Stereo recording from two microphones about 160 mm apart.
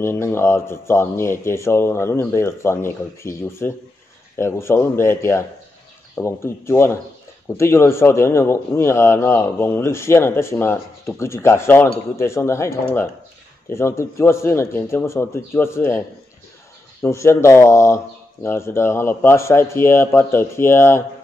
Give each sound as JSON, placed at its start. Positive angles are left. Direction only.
{"t": 0.0, "sound": "a man's voice", "side_deg": 15}
{"t": 17.0, "sound": "a man's voice", "side_deg": 15}